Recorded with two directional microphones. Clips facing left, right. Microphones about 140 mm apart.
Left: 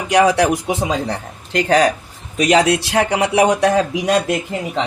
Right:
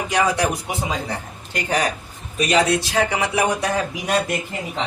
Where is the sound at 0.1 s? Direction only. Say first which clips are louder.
Left 8 dB; 85° left.